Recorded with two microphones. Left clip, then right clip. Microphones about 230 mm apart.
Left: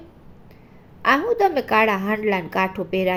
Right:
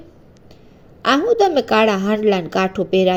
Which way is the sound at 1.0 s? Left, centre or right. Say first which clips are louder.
Right 3 dB; centre.